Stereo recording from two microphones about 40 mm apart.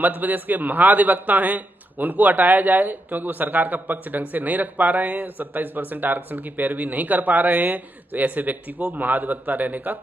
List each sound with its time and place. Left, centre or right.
0.0 s a man's voice: right